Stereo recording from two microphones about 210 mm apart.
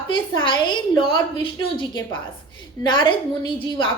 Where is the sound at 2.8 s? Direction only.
25° left (ahead or behind).